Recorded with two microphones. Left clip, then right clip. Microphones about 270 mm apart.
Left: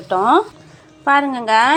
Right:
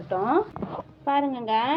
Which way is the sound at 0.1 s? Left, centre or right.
Left.